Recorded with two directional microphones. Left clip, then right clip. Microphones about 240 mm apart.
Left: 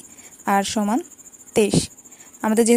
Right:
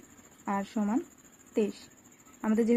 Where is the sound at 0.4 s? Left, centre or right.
Left.